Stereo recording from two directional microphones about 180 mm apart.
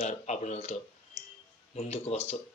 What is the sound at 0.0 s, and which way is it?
Speech, 40° left (ahead or behind).